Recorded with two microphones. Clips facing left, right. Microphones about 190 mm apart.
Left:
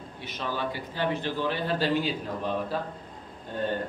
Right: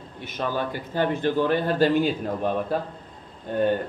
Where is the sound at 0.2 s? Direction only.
50° right (ahead or behind).